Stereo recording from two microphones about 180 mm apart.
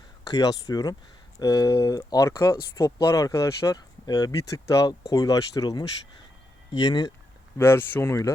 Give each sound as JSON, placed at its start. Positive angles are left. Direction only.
{"t": 0.3, "sound": "speech", "side_deg": 20}
{"t": 7.6, "sound": "speech", "side_deg": 10}